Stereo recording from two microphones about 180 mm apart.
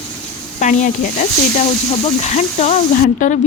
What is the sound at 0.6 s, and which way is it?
Speech, 45° left (ahead or behind).